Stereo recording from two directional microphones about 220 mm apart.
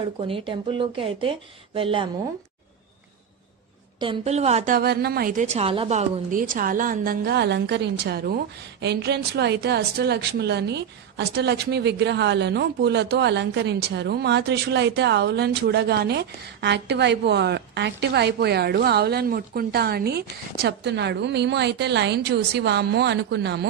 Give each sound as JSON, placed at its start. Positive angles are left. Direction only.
{"t": 0.2, "sound": "speech", "side_deg": -25}
{"t": 4.0, "sound": "a woman's voice", "side_deg": -25}
{"t": 5.5, "sound": "a woman's voice", "side_deg": -25}